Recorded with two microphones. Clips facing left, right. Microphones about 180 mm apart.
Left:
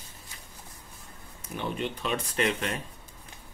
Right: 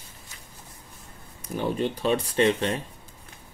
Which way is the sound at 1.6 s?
35° right (ahead or behind).